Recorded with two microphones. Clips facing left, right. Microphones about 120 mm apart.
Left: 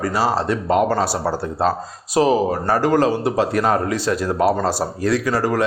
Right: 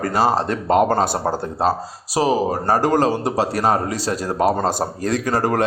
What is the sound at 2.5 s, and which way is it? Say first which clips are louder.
A man's voice: even; 40° right (ahead or behind).